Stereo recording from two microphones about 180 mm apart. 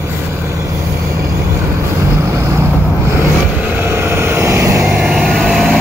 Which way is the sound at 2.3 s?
15° right (ahead or behind).